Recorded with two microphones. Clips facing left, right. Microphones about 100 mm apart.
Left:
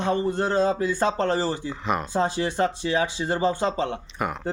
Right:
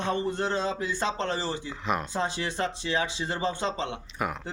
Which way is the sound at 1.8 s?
Centre (ahead or behind).